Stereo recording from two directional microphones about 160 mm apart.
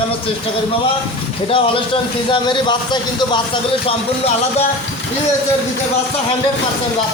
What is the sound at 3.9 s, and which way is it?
Speech, 40° left (ahead or behind).